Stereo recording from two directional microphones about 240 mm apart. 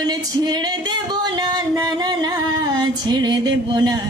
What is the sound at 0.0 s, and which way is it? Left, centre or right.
Singing, centre.